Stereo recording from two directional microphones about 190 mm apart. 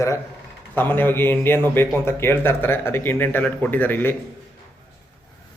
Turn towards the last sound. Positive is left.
turn(degrees=10)  # may be behind; listen again after turning